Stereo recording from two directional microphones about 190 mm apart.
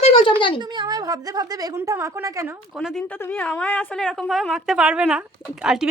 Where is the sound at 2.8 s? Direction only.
5° left (ahead or behind).